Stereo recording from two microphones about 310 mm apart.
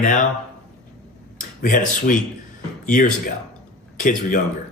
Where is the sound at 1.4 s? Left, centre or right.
Left.